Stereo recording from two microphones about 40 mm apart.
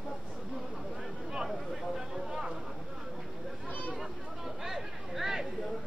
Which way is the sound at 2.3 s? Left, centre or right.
Centre.